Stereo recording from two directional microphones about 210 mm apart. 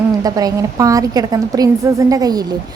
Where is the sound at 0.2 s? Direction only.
15° right (ahead or behind).